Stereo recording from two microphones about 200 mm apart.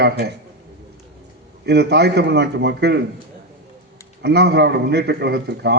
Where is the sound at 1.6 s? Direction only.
55° right (ahead or behind).